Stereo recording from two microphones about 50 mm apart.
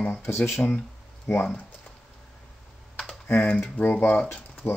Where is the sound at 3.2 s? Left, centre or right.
Left.